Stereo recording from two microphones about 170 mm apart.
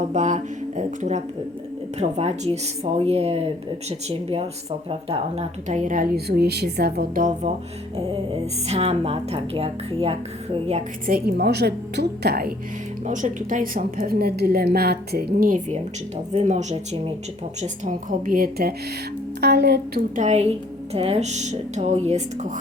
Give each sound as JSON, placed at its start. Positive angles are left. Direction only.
{"t": 0.0, "sound": "speech", "side_deg": -45}
{"t": 8.6, "sound": "speech", "side_deg": -40}
{"t": 11.0, "sound": "a woman's voice", "side_deg": -60}
{"t": 13.1, "sound": "a woman's voice", "side_deg": -50}
{"t": 19.4, "sound": "speech", "side_deg": -75}
{"t": 20.1, "sound": "speech", "side_deg": -40}